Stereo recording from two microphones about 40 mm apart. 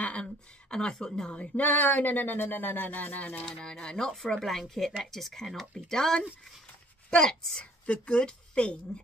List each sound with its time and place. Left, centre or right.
0.0 s a sound: left
0.7 s a woman's voice: left
1.6 s speech: left
3.6 s a woman's voice: centre